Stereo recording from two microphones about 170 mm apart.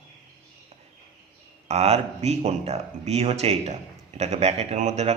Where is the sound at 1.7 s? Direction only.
40° right (ahead or behind).